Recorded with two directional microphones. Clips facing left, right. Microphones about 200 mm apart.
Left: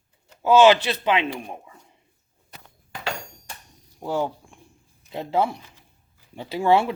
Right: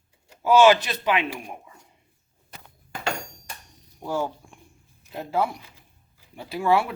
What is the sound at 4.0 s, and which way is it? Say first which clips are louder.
Speech: left 2 dB; 15° left (ahead or behind).